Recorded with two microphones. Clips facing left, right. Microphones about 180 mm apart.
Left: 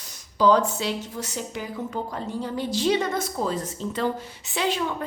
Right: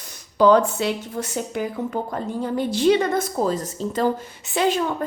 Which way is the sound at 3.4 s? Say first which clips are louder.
Right 4 dB; 40° right (ahead or behind).